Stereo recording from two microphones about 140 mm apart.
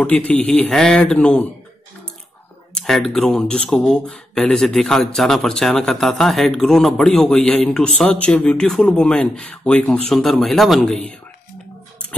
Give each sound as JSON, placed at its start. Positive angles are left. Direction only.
{"t": 0.0, "sound": "a man's voice", "side_deg": 10}
{"t": 2.7, "sound": "speech", "side_deg": 5}